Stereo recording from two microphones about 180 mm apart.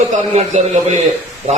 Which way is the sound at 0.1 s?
40° right (ahead or behind).